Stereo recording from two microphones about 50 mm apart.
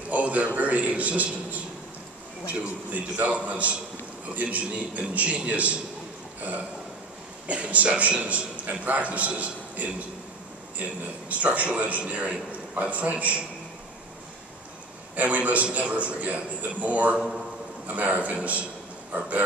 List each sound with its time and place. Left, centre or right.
0.1 s a man's voice: right
7.4 s a man's voice: right
11.2 s a man's voice: right
15.1 s a man's voice: right
19.1 s a sound: right